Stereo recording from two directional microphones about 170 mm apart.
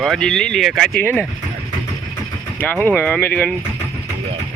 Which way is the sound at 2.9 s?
10° left (ahead or behind).